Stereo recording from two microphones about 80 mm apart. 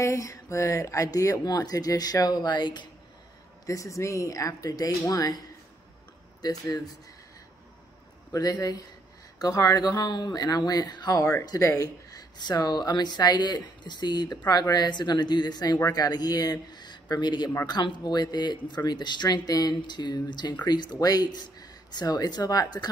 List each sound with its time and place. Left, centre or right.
0.0 s speech: left
3.6 s speech: left
6.4 s speech: left
8.3 s speech: left
11.4 s speech: left